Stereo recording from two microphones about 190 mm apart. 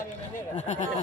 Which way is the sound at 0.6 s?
40° left (ahead or behind).